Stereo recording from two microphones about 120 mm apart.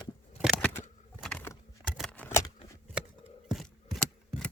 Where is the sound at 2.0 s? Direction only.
10° left (ahead or behind).